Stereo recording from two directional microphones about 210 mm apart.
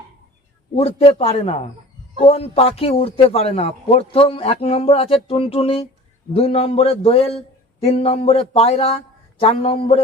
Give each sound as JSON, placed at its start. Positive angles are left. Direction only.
{"t": 0.8, "sound": "a man's voice", "side_deg": 30}